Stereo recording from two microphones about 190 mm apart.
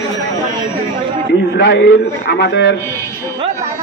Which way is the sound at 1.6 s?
65° left (ahead or behind).